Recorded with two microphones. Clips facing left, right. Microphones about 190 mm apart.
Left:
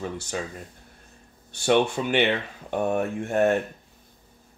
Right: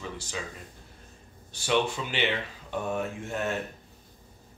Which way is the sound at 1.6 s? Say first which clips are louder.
Left 6 dB; 55° left (ahead or behind).